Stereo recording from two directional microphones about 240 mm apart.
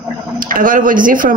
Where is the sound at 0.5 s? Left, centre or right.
Right.